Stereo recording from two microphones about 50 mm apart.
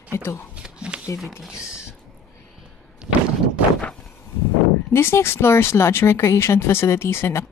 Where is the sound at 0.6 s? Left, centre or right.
Centre.